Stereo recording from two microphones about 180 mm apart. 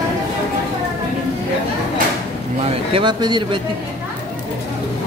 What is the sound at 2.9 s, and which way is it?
Speech, 25° right (ahead or behind).